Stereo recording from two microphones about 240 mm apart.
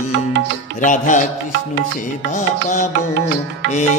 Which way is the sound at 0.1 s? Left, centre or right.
Right.